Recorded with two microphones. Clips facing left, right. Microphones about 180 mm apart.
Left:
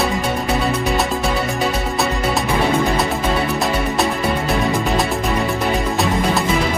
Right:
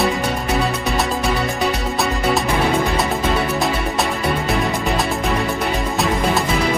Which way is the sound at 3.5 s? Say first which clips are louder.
Left 1 dB; centre (ahead or behind).